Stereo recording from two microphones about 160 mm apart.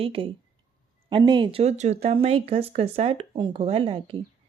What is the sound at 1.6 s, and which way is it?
Speech, 45° right (ahead or behind).